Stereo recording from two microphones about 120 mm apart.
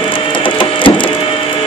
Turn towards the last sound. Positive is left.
turn(degrees=40)  # may be behind; listen again after turning